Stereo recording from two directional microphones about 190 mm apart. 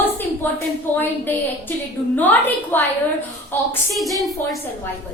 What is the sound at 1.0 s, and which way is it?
A woman's voice, 10° left (ahead or behind).